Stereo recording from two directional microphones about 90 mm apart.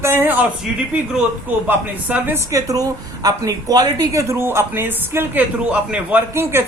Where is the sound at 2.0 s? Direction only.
20° right (ahead or behind).